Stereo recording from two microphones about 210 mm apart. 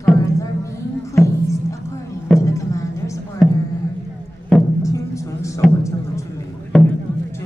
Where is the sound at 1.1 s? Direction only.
15° left (ahead or behind).